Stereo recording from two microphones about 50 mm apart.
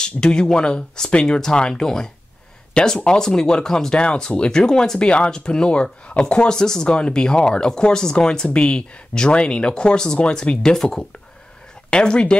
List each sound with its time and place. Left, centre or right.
0.0 s speech: centre